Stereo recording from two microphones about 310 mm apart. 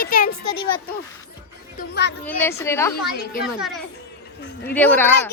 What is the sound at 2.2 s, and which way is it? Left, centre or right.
Speech, centre.